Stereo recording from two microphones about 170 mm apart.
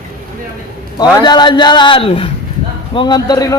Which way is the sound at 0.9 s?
25° left (ahead or behind).